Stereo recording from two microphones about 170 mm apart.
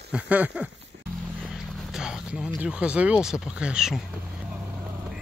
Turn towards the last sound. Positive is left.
turn(degrees=-5)  # may be behind; listen again after turning